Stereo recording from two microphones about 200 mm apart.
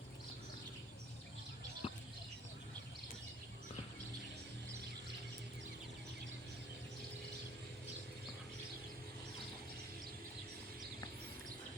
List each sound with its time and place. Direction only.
1.8 s basketball bounce: 30° left (ahead or behind)